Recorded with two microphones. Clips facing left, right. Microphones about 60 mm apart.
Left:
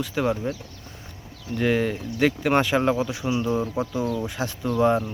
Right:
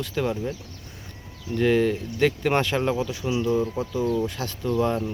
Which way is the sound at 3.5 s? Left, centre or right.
Left.